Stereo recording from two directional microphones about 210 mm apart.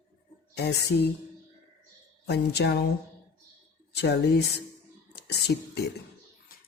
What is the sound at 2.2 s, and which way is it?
Speech, 50° left (ahead or behind).